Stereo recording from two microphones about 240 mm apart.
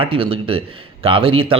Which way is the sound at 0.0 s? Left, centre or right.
Right.